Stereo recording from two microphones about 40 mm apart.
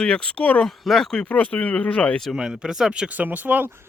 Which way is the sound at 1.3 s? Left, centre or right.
Left.